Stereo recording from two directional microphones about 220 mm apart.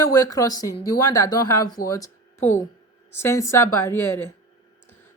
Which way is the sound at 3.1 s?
10° left (ahead or behind).